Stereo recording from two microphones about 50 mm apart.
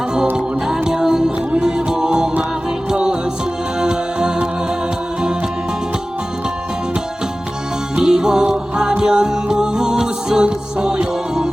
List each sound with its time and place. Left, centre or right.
0.3 s music: centre
7.9 s music: centre